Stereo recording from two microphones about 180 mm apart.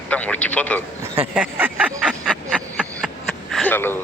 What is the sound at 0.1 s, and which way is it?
Speech, 10° left (ahead or behind).